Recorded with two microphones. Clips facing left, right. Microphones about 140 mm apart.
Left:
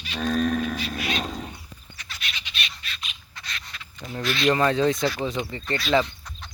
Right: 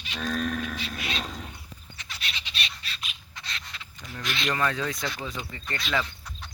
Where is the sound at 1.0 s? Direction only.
25° right (ahead or behind).